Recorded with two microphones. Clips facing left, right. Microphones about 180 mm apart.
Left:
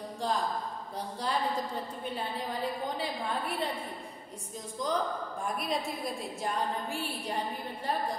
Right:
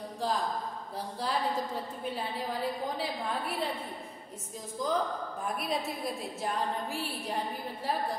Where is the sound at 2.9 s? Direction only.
Centre (ahead or behind).